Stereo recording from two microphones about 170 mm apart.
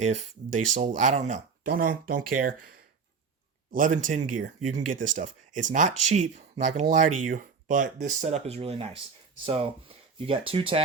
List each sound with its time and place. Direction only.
0.7 s speech: 50° right (ahead or behind)
3.7 s speech: 50° right (ahead or behind); by 10.8 s 30° right (ahead or behind)